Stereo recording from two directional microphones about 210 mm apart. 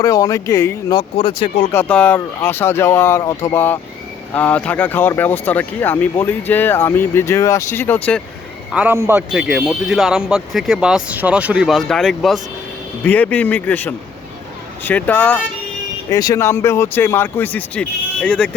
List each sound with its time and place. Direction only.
0.0 s speech: 15° left (ahead or behind)
1.1 s speech: 25° left (ahead or behind)
1.7 s speech: 10° left (ahead or behind)
8.7 s speech: 10° right (ahead or behind)